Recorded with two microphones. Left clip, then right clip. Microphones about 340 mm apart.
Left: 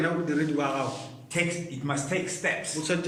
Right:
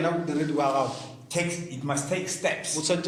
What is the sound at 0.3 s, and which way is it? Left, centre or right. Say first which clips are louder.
Speech: right 1 dB; centre.